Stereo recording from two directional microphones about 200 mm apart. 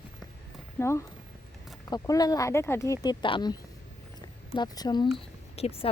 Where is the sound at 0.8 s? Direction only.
15° left (ahead or behind).